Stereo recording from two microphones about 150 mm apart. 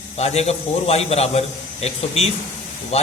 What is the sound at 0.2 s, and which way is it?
A man's voice, 45° left (ahead or behind).